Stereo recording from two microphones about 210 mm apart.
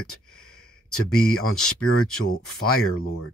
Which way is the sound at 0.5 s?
90° left.